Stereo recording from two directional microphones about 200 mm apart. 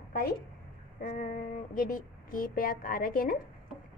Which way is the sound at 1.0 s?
40° left (ahead or behind).